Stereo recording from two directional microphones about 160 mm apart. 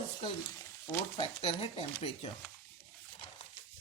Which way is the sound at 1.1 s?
35° left (ahead or behind).